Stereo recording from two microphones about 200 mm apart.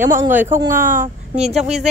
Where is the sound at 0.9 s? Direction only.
35° right (ahead or behind).